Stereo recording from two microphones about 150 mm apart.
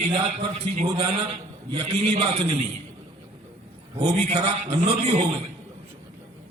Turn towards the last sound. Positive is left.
turn(degrees=-40)  # may be behind; listen again after turning